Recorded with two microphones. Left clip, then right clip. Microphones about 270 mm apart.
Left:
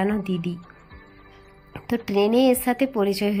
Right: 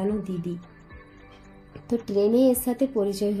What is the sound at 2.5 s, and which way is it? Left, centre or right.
Speech, left.